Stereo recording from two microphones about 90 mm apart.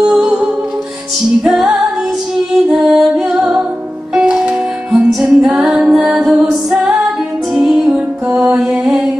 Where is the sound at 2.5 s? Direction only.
5° right (ahead or behind).